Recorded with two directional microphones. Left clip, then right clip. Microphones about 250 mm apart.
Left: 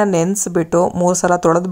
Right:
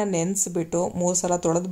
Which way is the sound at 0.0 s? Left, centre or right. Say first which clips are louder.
Left 9 dB; left.